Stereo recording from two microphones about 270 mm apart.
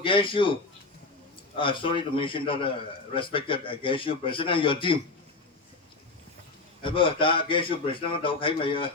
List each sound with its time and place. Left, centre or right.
0.0 s a man's voice: centre
6.8 s a man's voice: centre